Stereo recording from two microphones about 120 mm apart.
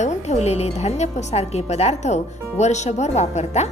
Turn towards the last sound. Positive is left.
turn(degrees=65)  # may be behind; listen again after turning